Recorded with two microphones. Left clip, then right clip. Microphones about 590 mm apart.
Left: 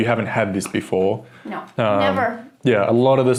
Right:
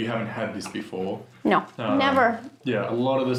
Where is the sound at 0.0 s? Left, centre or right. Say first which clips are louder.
Left 9 dB; left.